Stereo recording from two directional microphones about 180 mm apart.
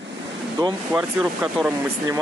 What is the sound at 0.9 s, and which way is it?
Speech, 5° right (ahead or behind).